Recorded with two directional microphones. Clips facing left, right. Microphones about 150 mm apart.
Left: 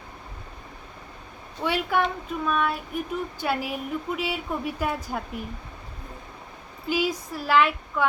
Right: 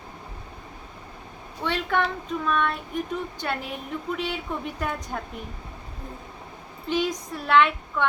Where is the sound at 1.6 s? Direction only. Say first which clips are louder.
Left 1 dB; 10° left (ahead or behind).